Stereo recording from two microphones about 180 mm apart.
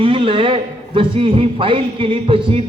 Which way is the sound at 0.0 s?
30° right (ahead or behind).